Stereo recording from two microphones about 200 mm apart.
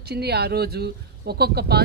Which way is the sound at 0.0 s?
55° right (ahead or behind).